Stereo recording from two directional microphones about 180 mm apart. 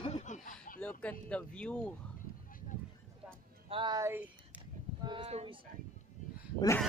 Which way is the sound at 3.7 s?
25° right (ahead or behind).